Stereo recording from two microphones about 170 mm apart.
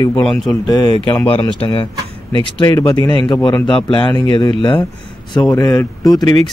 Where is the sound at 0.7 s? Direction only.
25° left (ahead or behind).